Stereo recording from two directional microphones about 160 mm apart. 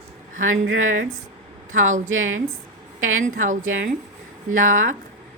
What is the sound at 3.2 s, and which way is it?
A woman's voice, 55° right (ahead or behind).